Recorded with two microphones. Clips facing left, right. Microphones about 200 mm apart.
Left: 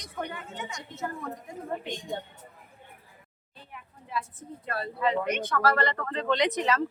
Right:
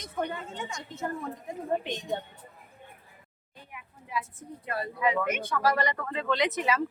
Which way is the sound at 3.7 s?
10° right (ahead or behind).